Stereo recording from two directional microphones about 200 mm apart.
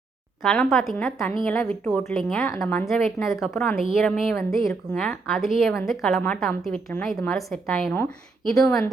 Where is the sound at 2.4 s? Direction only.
10° left (ahead or behind).